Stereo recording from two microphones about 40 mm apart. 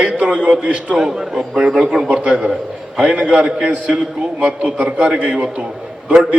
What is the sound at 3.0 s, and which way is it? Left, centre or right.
Speech, right.